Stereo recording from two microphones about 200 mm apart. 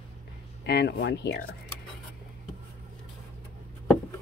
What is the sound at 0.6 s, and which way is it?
Speech, 55° left (ahead or behind).